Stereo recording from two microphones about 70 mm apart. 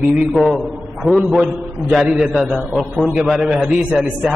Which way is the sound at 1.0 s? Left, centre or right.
Centre.